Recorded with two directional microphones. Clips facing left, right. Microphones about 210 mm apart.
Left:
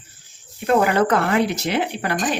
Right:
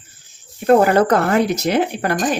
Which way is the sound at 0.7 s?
40° right (ahead or behind).